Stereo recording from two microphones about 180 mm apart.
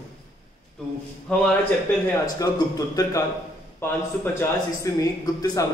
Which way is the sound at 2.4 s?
20° left (ahead or behind).